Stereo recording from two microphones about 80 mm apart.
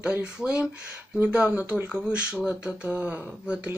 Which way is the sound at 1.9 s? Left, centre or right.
Centre.